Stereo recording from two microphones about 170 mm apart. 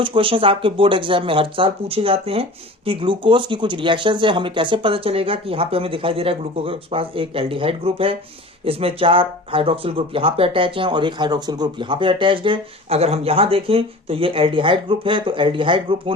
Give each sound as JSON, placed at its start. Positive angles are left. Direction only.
{"t": 0.0, "sound": "speech", "side_deg": -30}